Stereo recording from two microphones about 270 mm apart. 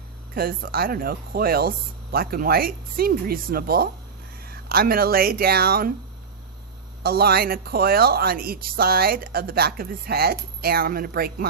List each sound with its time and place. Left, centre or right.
0.3 s speech: right
7.0 s speech: right